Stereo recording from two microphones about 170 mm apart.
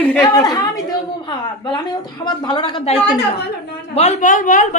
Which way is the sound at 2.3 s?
25° left (ahead or behind).